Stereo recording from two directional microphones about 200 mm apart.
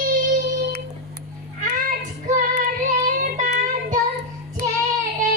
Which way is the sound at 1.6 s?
40° right (ahead or behind).